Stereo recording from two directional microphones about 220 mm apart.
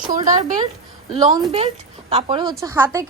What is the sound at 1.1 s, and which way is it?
A woman's voice, 20° right (ahead or behind).